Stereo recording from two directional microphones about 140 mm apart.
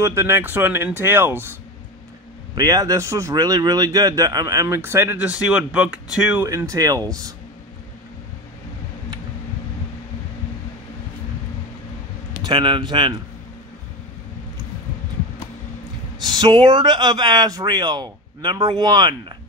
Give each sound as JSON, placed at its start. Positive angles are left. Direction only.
{"t": 0.0, "sound": "speech", "side_deg": -20}
{"t": 2.5, "sound": "speech", "side_deg": -25}
{"t": 6.4, "sound": "speech", "side_deg": -20}
{"t": 12.4, "sound": "speech", "side_deg": -35}
{"t": 16.2, "sound": "speech", "side_deg": -30}